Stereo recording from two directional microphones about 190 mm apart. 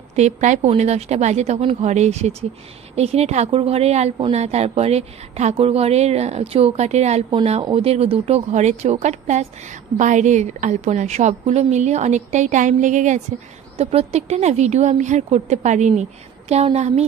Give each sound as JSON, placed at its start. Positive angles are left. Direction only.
{"t": 0.1, "sound": "a woman's voice", "side_deg": -35}